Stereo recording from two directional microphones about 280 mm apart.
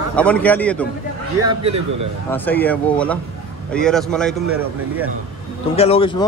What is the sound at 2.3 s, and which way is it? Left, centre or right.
A man's voice, centre.